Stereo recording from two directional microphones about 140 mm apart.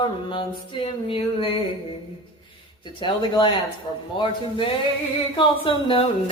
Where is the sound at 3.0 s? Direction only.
35° left (ahead or behind).